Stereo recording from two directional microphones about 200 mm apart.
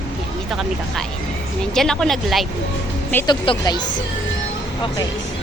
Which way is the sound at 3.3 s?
20° left (ahead or behind).